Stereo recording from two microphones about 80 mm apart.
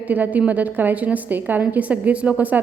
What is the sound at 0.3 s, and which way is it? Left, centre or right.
A woman's voice, centre.